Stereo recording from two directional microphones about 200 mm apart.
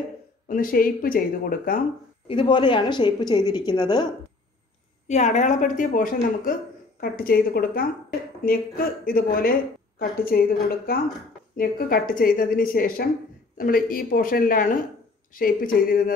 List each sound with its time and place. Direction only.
0.5 s a woman's voice: 45° left (ahead or behind)
2.2 s a woman's voice: 25° left (ahead or behind)
5.0 s a woman's voice: 35° left (ahead or behind)